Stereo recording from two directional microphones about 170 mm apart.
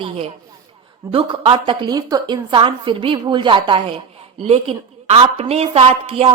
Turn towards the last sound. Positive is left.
turn(degrees=-35)  # may be behind; listen again after turning